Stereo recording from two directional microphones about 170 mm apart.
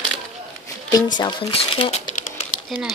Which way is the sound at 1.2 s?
25° left (ahead or behind).